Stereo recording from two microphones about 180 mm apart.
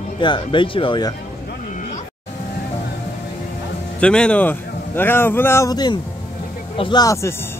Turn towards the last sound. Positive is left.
turn(degrees=15)  # may be behind; listen again after turning